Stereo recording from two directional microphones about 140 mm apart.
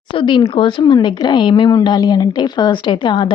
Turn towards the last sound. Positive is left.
turn(degrees=35)  # may be behind; listen again after turning